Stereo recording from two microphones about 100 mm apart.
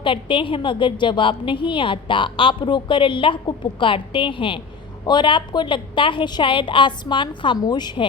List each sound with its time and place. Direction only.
0.0 s a woman's voice: 55° left (ahead or behind)